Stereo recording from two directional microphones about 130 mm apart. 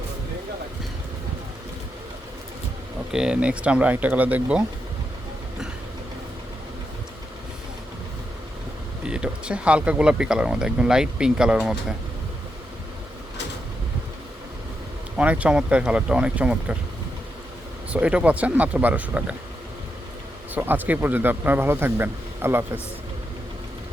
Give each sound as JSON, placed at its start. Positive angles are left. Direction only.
{"t": 3.1, "sound": "speech", "side_deg": -5}
{"t": 9.0, "sound": "speech", "side_deg": -5}
{"t": 15.2, "sound": "speech", "side_deg": -10}
{"t": 17.9, "sound": "speech", "side_deg": -10}
{"t": 20.5, "sound": "speech", "side_deg": -15}